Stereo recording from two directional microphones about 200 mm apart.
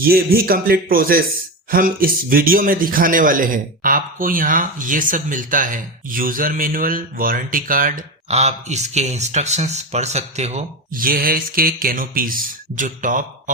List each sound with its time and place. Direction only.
0.0 s speech: 50° right (ahead or behind)